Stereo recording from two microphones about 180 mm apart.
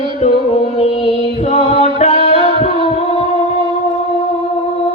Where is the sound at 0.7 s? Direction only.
35° left (ahead or behind).